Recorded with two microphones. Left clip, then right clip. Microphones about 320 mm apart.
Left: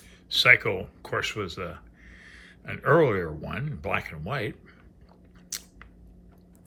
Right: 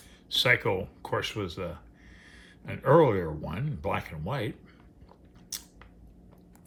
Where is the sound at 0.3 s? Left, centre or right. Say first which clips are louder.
Left 5 dB; centre.